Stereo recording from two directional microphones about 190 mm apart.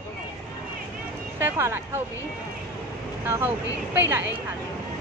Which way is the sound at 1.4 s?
10° right (ahead or behind).